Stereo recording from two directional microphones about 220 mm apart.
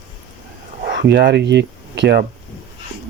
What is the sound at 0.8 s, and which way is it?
Speech, 45° right (ahead or behind).